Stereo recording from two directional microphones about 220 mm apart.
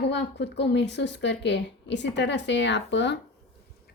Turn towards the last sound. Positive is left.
turn(degrees=55)  # may be behind; listen again after turning